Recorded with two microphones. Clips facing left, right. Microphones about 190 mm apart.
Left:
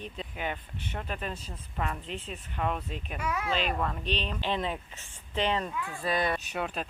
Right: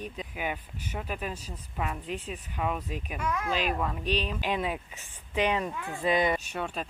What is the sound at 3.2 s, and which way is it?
Speech, 5° left (ahead or behind).